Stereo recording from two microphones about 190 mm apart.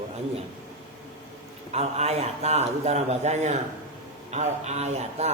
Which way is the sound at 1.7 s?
35° right (ahead or behind).